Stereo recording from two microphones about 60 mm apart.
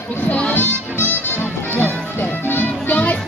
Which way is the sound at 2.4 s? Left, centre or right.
Left.